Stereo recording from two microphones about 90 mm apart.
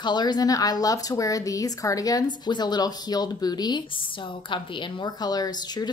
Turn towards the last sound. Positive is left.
turn(degrees=45)  # may be behind; listen again after turning